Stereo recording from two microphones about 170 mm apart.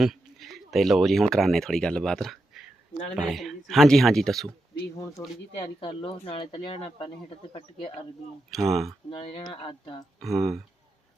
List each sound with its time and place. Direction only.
0.0 s speech: centre (ahead or behind)
5.2 s speech: 20° left (ahead or behind)
5.8 s speech: 30° left (ahead or behind)
8.4 s speech: centre (ahead or behind)
9.0 s speech: 30° left (ahead or behind)
10.2 s speech: centre (ahead or behind)